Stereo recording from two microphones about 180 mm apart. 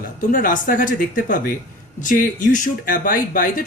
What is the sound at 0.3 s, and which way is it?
Speech, 50° left (ahead or behind).